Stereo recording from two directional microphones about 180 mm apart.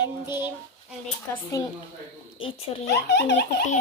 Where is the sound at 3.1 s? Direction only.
75° left (ahead or behind).